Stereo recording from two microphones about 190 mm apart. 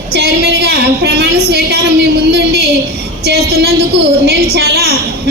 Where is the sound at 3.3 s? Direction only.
60° right (ahead or behind).